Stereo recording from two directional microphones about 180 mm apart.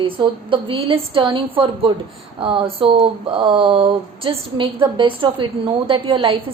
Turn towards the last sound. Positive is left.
turn(degrees=-25)  # may be behind; listen again after turning